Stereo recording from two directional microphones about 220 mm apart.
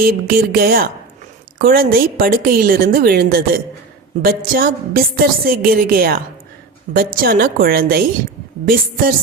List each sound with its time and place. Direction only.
0.0 s a woman's voice: 40° right (ahead or behind)